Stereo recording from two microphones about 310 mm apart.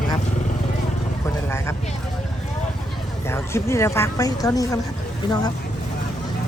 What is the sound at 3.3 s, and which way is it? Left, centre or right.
A woman's voice, centre.